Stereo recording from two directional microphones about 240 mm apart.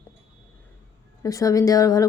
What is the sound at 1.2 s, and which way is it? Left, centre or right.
Speech, centre.